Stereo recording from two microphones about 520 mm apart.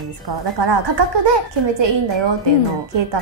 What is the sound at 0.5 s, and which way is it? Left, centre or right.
Speech, right.